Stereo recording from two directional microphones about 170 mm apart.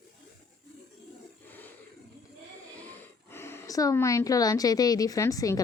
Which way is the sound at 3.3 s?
15° left (ahead or behind).